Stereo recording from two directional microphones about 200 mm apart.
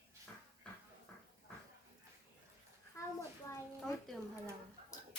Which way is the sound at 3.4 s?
5° left (ahead or behind).